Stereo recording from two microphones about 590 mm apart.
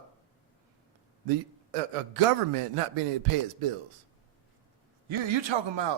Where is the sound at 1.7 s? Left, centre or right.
Right.